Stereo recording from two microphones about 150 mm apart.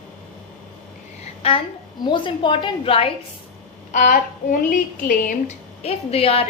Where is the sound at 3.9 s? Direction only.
55° left (ahead or behind).